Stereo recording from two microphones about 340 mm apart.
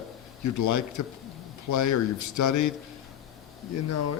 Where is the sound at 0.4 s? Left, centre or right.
Left.